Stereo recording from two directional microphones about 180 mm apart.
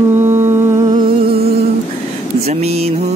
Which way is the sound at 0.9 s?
55° right (ahead or behind).